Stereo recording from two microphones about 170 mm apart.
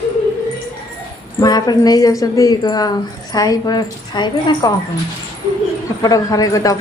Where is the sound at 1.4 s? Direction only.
25° left (ahead or behind).